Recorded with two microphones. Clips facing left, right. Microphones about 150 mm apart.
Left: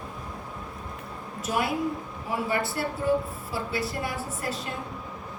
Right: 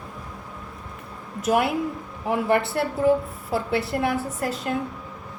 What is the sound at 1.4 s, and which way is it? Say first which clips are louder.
A woman's voice: right 5 dB; 60° right (ahead or behind).